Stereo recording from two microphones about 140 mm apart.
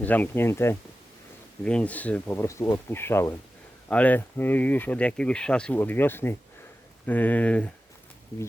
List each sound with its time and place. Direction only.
0.0 s speech: 10° left (ahead or behind)